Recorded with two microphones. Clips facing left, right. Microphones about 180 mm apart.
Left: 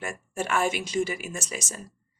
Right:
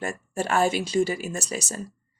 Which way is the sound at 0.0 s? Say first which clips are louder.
Right 3 dB; 35° right (ahead or behind).